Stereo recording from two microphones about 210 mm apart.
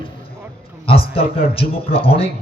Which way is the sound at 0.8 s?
25° left (ahead or behind).